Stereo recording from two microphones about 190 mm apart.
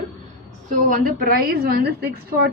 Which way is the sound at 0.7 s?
45° right (ahead or behind).